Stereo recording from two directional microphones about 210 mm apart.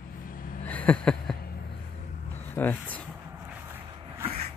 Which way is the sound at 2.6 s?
10° left (ahead or behind).